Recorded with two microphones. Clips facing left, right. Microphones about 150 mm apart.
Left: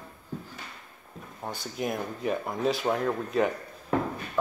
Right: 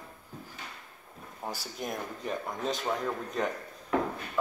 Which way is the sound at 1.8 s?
5° left (ahead or behind).